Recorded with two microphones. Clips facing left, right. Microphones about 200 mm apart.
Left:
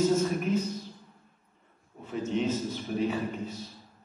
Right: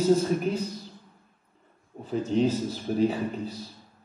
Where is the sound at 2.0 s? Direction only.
35° right (ahead or behind).